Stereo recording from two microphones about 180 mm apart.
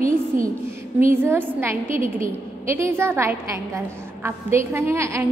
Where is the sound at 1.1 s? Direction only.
10° right (ahead or behind).